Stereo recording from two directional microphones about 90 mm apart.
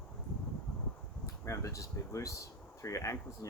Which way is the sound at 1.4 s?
35° left (ahead or behind).